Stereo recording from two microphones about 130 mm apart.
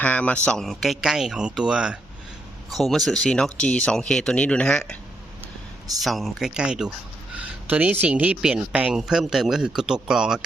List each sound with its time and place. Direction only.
0.0 s speech: 10° left (ahead or behind)
6.0 s speech: centre (ahead or behind)